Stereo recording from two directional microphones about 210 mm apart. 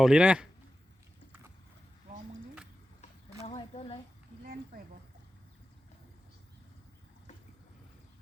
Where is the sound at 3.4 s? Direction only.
25° left (ahead or behind).